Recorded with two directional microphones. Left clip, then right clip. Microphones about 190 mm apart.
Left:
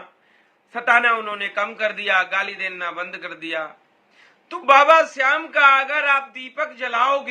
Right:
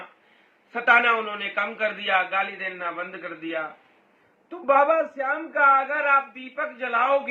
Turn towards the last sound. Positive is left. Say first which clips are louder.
# left 2 dB
turn(degrees=20)  # may be behind; listen again after turning